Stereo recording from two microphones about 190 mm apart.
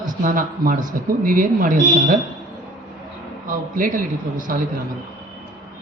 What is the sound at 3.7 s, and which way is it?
Speech, 45° right (ahead or behind).